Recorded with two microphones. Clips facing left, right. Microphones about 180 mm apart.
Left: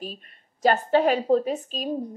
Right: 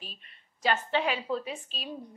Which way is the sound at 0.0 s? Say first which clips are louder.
Left 12 dB; 45° left (ahead or behind).